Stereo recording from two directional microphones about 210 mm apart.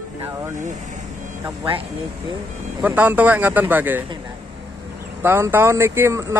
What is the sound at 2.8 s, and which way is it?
Speech, 5° right (ahead or behind).